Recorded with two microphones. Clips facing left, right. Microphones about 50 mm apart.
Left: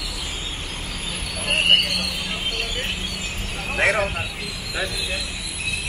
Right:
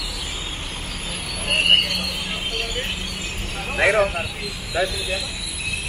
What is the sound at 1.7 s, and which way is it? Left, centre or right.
Horse, right.